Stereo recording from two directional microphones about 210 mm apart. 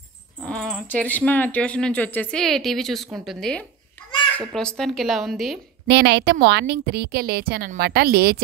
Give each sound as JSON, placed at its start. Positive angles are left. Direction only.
{"t": 0.5, "sound": "speech", "side_deg": 5}
{"t": 5.9, "sound": "speech", "side_deg": -55}